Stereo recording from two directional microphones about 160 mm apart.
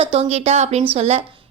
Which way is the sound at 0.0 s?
35° right (ahead or behind).